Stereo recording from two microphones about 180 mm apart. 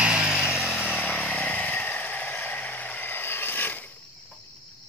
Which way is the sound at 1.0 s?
5° left (ahead or behind).